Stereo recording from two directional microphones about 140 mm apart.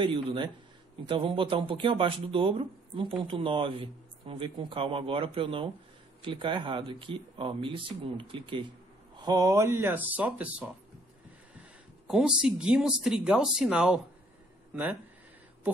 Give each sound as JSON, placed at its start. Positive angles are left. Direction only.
{"t": 0.0, "sound": "speech", "side_deg": -35}
{"t": 9.2, "sound": "speech", "side_deg": -25}
{"t": 12.1, "sound": "speech", "side_deg": -5}